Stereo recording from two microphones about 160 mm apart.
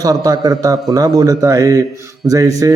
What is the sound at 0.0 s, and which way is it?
Mantra, 25° right (ahead or behind).